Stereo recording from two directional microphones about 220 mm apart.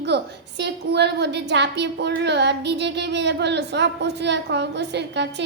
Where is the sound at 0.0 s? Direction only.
50° right (ahead or behind).